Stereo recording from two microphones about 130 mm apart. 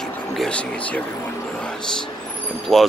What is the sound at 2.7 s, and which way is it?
Speech, centre (ahead or behind).